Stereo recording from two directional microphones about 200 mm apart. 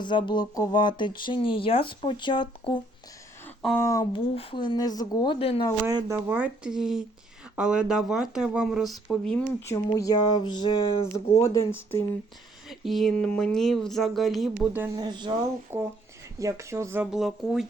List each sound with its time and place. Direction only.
0.0 s speech: 20° left (ahead or behind)
5.8 s speech: 15° right (ahead or behind); by 11.7 s 15° left (ahead or behind)
12.6 s speech: centre (ahead or behind)
14.9 s speech: 20° right (ahead or behind)
15.7 s speech: 10° right (ahead or behind)